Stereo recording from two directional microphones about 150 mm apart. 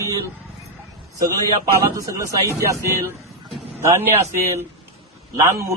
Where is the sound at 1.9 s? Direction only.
20° right (ahead or behind).